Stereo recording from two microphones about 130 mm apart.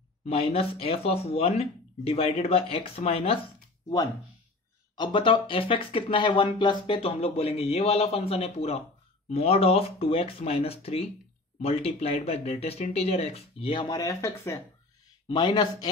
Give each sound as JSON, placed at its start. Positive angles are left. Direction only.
{"t": 0.3, "sound": "speech", "side_deg": 50}
{"t": 4.9, "sound": "speech", "side_deg": 35}
{"t": 15.2, "sound": "speech", "side_deg": 35}